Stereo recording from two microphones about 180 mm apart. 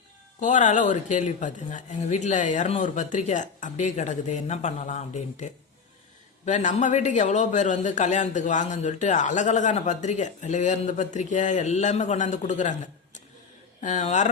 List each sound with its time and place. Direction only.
0.3 s speech: 45° left (ahead or behind)